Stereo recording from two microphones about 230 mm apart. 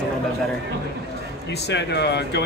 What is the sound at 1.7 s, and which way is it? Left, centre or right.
Speech, left.